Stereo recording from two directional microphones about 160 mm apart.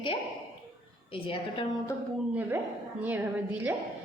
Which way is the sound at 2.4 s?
10° right (ahead or behind).